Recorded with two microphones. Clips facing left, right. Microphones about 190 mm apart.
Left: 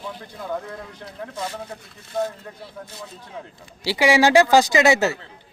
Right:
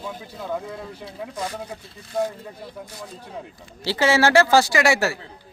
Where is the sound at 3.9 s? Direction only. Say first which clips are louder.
Left 2 dB; 15° left (ahead or behind).